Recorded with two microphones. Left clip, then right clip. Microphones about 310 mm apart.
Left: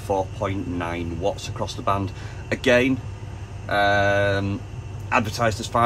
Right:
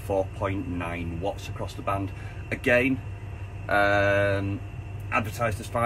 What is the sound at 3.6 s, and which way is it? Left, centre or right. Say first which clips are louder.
Speech: left 2 dB; centre.